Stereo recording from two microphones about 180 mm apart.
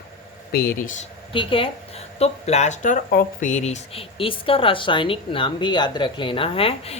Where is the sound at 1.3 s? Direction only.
30° left (ahead or behind).